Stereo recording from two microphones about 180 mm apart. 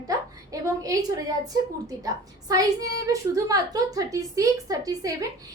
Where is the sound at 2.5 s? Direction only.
20° right (ahead or behind).